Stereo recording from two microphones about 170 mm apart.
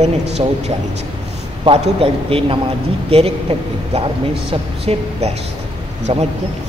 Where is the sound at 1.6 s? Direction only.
35° right (ahead or behind).